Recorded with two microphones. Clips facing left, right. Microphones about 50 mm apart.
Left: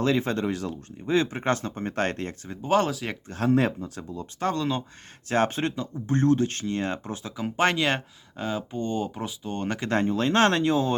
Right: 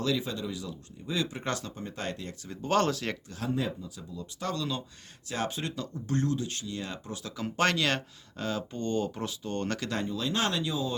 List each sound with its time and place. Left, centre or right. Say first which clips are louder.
0.0 s speech: left 7 dB; left
2.6 s speech: left 3 dB; centre
3.2 s speech: left 9 dB; left
3.5 s speech: left 9 dB; left
4.1 s speech: left 7 dB; left
5.7 s speech: left 5 dB; left
6.1 s speech: left 8 dB; left
7.3 s speech: left 4 dB; centre
9.9 s speech: left 12 dB; left